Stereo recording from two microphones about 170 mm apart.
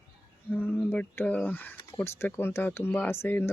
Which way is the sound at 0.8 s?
10° left (ahead or behind).